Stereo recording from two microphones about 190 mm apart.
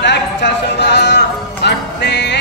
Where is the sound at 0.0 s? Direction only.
65° left (ahead or behind).